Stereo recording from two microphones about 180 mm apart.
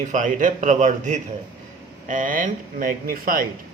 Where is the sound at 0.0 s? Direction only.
45° right (ahead or behind).